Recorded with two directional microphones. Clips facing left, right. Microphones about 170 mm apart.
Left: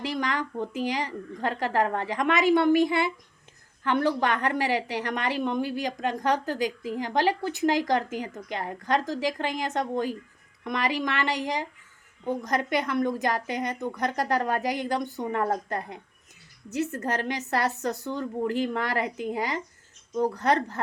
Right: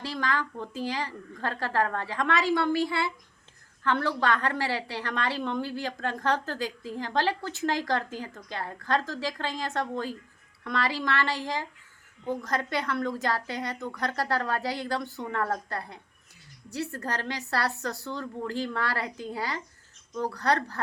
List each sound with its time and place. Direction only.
0.0 s a woman's voice: 20° left (ahead or behind)